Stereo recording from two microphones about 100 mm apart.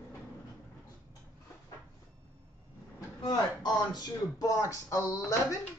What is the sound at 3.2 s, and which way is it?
Speech, 45° left (ahead or behind).